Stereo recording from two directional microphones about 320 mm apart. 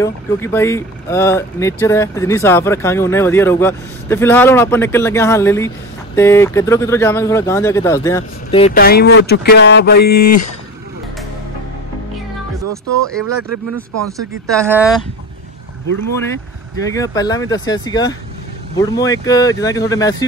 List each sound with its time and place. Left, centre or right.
0.0 s speech: centre; by 10.5 s left
13.0 s speech: centre
14.6 s speech: centre
16.9 s speech: centre